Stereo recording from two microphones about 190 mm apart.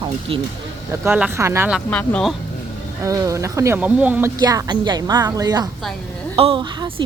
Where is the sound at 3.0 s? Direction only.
15° right (ahead or behind).